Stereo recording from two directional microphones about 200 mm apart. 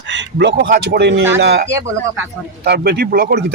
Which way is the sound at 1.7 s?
15° right (ahead or behind).